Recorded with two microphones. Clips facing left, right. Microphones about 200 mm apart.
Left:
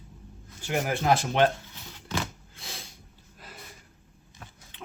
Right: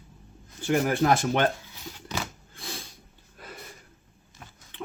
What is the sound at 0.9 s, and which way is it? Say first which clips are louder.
Speech: right 2 dB; 50° right (ahead or behind).